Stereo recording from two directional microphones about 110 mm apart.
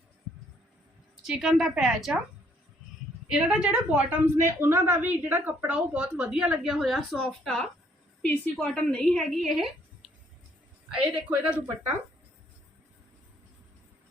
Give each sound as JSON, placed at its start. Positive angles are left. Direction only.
{"t": 1.2, "sound": "a woman's voice", "side_deg": -5}
{"t": 3.2, "sound": "a woman's voice", "side_deg": -5}
{"t": 8.2, "sound": "a woman's voice", "side_deg": 15}
{"t": 11.3, "sound": "a woman's voice", "side_deg": -15}